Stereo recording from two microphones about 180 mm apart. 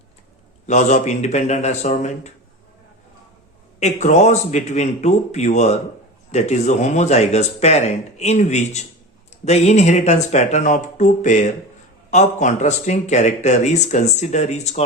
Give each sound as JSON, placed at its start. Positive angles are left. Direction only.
{"t": 0.7, "sound": "speech", "side_deg": 40}
{"t": 3.8, "sound": "speech", "side_deg": 40}